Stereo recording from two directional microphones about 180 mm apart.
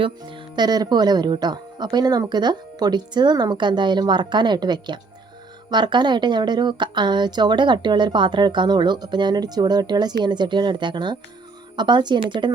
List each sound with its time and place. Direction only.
0.0 s speech: 30° right (ahead or behind)